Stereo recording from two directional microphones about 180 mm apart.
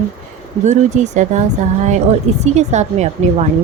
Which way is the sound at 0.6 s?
40° right (ahead or behind).